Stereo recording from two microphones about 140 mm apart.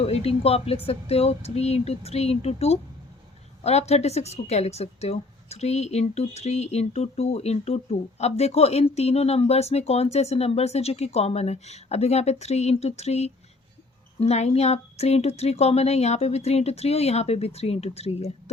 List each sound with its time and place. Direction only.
0.0 s a woman's voice: 45° left (ahead or behind)